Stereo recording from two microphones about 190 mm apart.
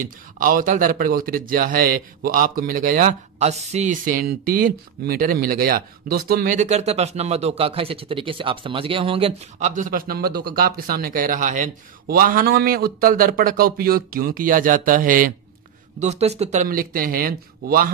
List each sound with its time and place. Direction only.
0.0 s a man's voice: 45° right (ahead or behind)
16.0 s speech: 35° right (ahead or behind)
16.6 s a man's voice: 50° right (ahead or behind)